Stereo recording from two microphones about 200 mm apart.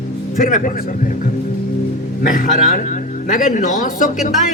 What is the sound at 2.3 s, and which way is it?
A man's voice, 45° left (ahead or behind).